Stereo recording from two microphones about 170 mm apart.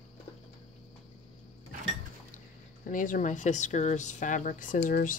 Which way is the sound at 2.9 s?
50° left (ahead or behind).